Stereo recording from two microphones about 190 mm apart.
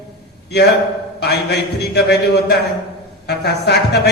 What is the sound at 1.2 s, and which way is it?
Speech, 60° left (ahead or behind).